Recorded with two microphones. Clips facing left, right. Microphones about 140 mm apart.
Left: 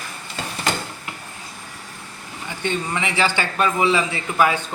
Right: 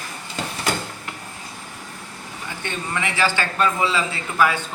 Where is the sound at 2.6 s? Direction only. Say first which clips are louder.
Left 3 dB; 20° left (ahead or behind).